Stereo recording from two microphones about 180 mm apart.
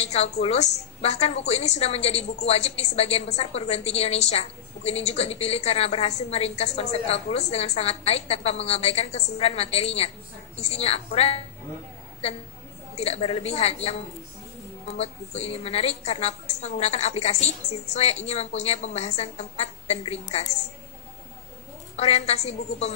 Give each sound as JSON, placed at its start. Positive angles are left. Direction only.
{"t": 0.0, "sound": "a woman's voice", "side_deg": 35}
{"t": 12.9, "sound": "a woman's voice", "side_deg": 35}
{"t": 15.0, "sound": "a woman's voice", "side_deg": 35}
{"t": 21.9, "sound": "a woman's voice", "side_deg": 35}